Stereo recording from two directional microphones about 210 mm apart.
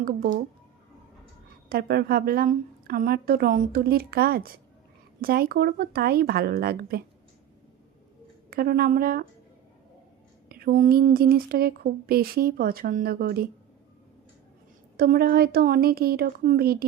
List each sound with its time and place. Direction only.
0.0 s speech: 45° right (ahead or behind)
1.7 s speech: 45° right (ahead or behind)
8.4 s speech: 45° right (ahead or behind)
10.5 s speech: 45° right (ahead or behind)
14.9 s speech: 45° right (ahead or behind)